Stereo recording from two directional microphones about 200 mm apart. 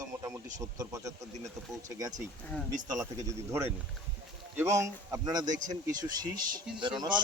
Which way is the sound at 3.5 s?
15° right (ahead or behind).